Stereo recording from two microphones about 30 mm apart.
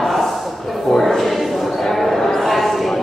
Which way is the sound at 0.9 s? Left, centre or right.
Centre.